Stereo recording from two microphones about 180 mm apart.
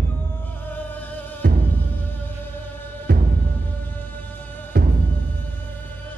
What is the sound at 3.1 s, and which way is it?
Music, 60° right (ahead or behind).